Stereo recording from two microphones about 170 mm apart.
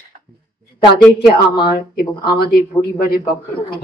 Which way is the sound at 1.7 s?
65° left (ahead or behind).